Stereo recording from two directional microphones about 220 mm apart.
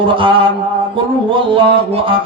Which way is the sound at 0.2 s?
25° right (ahead or behind).